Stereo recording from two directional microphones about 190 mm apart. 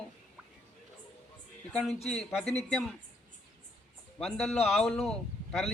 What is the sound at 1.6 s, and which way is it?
Speech, 5° left (ahead or behind).